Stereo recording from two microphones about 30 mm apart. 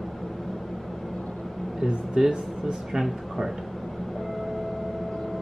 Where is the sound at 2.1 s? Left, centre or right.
Right.